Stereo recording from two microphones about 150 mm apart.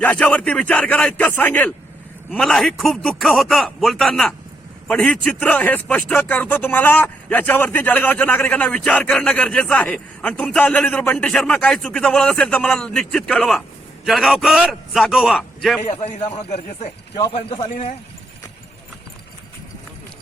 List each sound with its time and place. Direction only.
0.0 s a man's voice: 10° left (ahead or behind)
15.8 s a man's voice: 50° left (ahead or behind)